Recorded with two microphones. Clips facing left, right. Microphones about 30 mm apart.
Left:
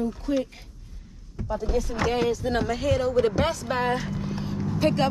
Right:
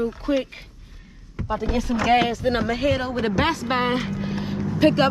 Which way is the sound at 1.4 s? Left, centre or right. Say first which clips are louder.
Right 2 dB; right.